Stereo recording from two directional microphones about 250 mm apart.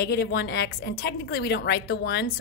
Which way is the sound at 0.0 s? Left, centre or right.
Left.